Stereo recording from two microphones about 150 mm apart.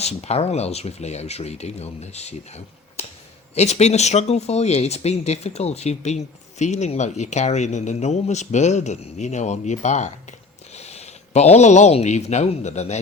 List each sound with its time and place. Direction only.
0.0 s speech: 45° left (ahead or behind)